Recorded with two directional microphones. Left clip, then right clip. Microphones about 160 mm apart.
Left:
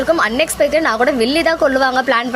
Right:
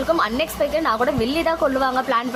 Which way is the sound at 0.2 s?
20° left (ahead or behind).